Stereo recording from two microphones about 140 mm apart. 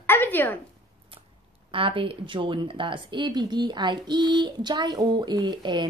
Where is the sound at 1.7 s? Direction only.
40° right (ahead or behind).